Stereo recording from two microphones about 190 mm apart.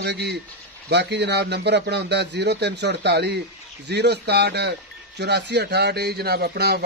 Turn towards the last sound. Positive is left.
turn(degrees=-60)  # may be behind; listen again after turning